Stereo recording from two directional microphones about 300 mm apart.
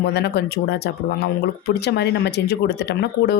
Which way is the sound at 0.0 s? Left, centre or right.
Left.